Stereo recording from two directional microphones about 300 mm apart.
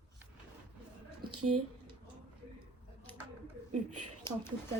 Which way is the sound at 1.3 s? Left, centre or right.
Right.